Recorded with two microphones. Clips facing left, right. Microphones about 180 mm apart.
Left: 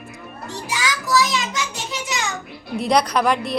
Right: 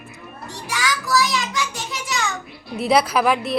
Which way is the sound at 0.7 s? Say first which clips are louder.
Even; 20° left (ahead or behind).